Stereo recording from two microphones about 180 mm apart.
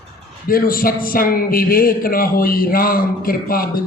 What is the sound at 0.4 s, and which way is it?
A man's voice, 55° left (ahead or behind).